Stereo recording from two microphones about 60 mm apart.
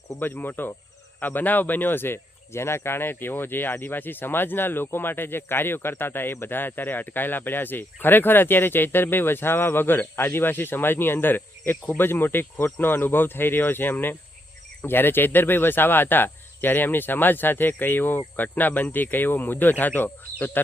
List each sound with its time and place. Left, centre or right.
0.2 s speech: left